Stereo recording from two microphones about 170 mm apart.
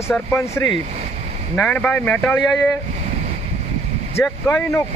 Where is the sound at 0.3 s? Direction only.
15° left (ahead or behind).